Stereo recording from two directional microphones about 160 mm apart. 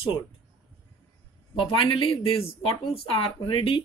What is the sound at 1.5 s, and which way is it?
A woman's voice, 30° left (ahead or behind).